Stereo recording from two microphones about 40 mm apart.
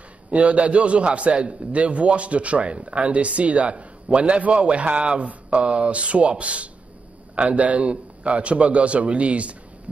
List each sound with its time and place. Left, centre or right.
0.3 s a man's voice: right